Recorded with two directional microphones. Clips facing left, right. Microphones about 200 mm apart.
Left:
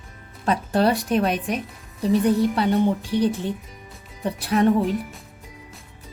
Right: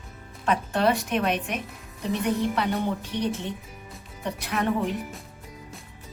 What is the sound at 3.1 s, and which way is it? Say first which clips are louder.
A woman's voice: left 6 dB; 35° left (ahead or behind).